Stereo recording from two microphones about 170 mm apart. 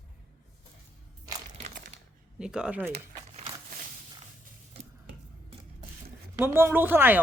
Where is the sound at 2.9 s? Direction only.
35° right (ahead or behind).